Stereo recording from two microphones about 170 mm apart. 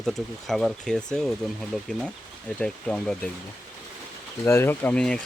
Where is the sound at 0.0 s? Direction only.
Centre (ahead or behind).